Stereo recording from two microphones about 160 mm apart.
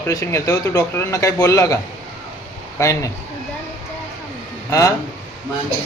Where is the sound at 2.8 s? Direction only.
20° left (ahead or behind).